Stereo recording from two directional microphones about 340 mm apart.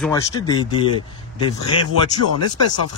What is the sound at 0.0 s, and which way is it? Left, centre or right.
Speech, centre.